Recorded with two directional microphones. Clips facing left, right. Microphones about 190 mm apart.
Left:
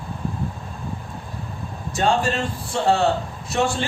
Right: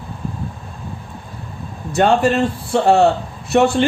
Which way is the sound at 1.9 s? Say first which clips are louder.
Right 6 dB; 60° right (ahead or behind).